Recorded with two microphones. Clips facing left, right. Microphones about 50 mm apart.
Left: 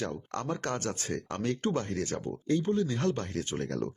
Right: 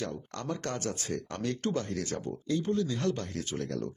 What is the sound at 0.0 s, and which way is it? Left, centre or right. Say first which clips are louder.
Speech: left 2 dB; left.